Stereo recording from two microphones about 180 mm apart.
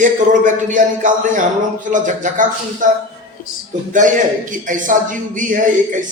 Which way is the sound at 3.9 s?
45° right (ahead or behind).